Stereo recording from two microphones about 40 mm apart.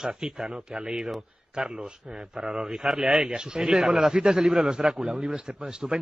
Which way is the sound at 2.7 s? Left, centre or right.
Centre.